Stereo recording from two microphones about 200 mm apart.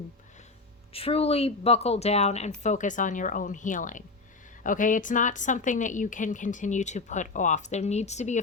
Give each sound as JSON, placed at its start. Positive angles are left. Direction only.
{"t": 0.9, "sound": "a woman's voice", "side_deg": 30}